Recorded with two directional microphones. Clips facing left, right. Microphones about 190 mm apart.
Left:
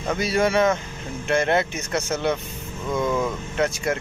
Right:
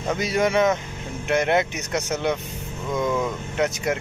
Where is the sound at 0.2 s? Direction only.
20° right (ahead or behind).